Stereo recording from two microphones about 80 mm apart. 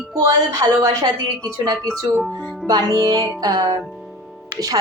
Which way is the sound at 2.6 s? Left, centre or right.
Right.